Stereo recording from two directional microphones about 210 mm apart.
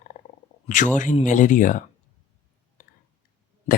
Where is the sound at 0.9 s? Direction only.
35° left (ahead or behind).